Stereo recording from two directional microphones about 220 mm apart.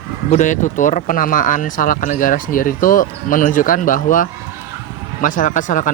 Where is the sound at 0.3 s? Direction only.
35° left (ahead or behind).